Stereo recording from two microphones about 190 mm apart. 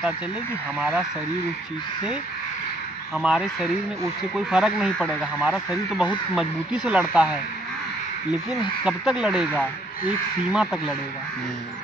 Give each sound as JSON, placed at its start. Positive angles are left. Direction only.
{"t": 0.7, "sound": "speech", "side_deg": -5}
{"t": 3.2, "sound": "speech", "side_deg": -5}